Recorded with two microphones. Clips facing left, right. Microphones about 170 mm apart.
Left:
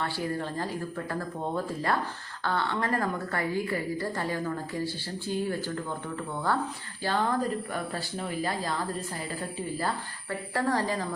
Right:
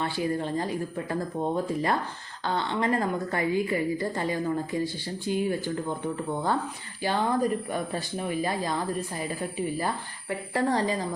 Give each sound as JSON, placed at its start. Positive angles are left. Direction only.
{"t": 0.0, "sound": "a woman's voice", "side_deg": -20}